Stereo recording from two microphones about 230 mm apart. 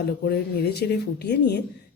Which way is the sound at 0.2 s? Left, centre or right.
Left.